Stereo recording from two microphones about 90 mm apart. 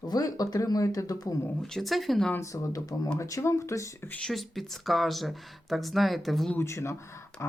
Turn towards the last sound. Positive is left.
turn(degrees=30)  # may be behind; listen again after turning